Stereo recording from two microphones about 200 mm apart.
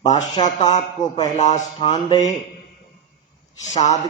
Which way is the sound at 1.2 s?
35° left (ahead or behind).